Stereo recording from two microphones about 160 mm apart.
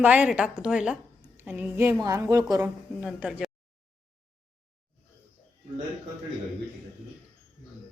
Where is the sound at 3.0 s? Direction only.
5° right (ahead or behind).